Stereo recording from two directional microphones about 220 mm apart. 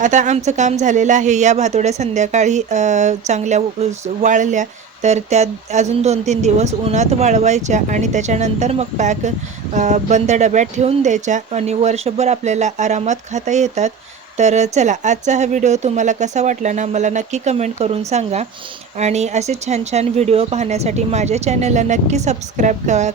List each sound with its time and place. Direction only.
0.0 s speech: 35° right (ahead or behind)